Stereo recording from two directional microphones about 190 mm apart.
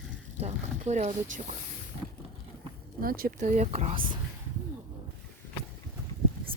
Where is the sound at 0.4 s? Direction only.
35° right (ahead or behind).